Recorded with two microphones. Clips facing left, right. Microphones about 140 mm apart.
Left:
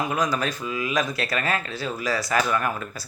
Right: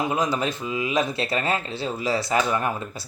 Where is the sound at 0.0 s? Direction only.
25° right (ahead or behind).